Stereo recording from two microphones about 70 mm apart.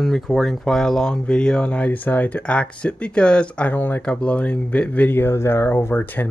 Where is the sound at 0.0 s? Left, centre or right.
Centre; by 4.0 s left.